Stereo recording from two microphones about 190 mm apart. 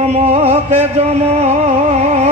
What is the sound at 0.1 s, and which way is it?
Music, 35° right (ahead or behind).